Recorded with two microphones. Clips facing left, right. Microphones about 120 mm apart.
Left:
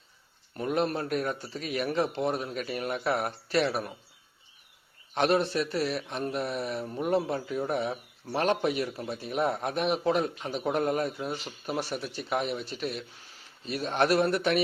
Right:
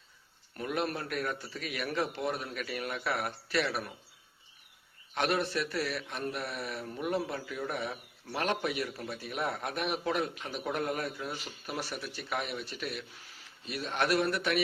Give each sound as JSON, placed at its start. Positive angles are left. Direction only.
{"t": 0.5, "sound": "a man's voice", "side_deg": 30}
{"t": 5.1, "sound": "a man's voice", "side_deg": 30}
{"t": 7.0, "sound": "a man's voice", "side_deg": 35}